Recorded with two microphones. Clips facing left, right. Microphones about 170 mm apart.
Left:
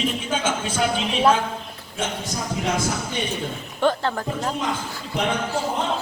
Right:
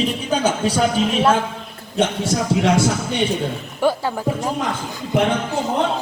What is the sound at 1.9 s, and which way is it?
Speech, 75° right (ahead or behind).